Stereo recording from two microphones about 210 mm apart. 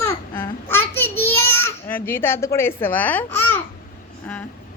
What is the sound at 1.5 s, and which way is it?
Speech, 10° left (ahead or behind).